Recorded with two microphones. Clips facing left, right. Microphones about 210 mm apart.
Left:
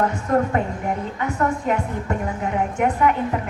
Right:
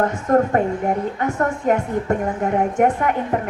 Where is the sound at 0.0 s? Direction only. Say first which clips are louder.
Right 3 dB; 45° right (ahead or behind).